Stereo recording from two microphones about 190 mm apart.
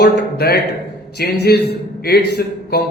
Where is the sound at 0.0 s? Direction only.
60° left (ahead or behind).